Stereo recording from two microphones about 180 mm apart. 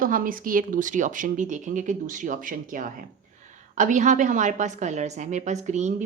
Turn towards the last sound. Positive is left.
turn(degrees=-40)  # may be behind; listen again after turning